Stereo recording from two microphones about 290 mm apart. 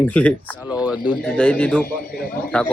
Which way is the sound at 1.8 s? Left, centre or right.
Left.